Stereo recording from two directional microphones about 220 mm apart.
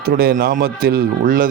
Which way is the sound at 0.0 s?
45° right (ahead or behind).